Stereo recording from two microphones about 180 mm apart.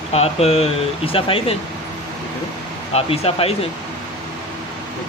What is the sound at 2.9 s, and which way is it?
Speech, 35° left (ahead or behind).